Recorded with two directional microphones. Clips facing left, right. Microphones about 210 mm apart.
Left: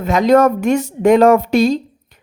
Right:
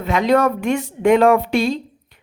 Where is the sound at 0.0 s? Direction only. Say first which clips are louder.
Left 4 dB; 45° left (ahead or behind).